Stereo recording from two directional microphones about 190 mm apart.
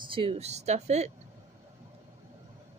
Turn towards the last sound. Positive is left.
turn(degrees=-35)  # may be behind; listen again after turning